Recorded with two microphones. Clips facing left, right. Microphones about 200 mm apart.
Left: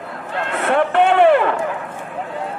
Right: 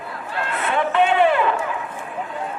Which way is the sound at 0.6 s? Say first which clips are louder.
Left 4 dB; 60° left (ahead or behind).